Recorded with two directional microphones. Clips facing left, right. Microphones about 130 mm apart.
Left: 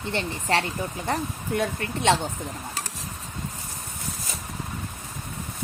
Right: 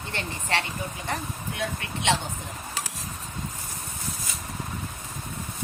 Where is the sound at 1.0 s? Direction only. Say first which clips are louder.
Left 5 dB; 40° left (ahead or behind).